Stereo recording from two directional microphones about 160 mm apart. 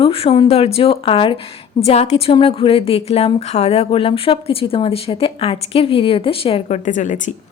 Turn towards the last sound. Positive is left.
turn(degrees=50)  # may be behind; listen again after turning